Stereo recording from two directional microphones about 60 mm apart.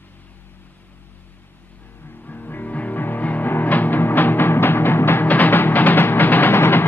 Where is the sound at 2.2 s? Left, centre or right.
Left.